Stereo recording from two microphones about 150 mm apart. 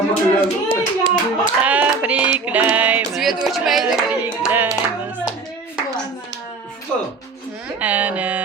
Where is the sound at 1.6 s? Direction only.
10° right (ahead or behind).